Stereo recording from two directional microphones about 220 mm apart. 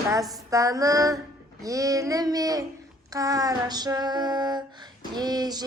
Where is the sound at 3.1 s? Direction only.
15° right (ahead or behind).